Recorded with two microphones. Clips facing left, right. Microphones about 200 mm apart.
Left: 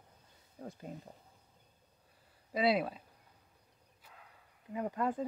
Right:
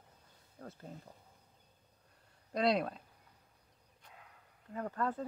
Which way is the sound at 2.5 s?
5° left (ahead or behind).